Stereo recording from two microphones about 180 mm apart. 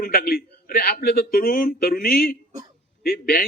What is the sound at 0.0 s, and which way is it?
A man's voice, 55° left (ahead or behind).